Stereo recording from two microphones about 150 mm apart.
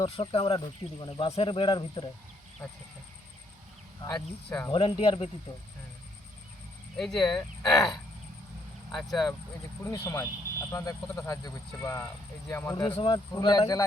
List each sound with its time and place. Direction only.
0.0 s speech: 35° left (ahead or behind)
2.6 s speech: 20° left (ahead or behind)
4.4 s speech: 10° left (ahead or behind)
4.7 s speech: 35° left (ahead or behind)
6.9 s speech: 5° left (ahead or behind)
7.8 s speech: 25° left (ahead or behind)
8.9 s speech: centre (ahead or behind)
9.8 s speech: 20° left (ahead or behind)
13.0 s speech: 35° left (ahead or behind)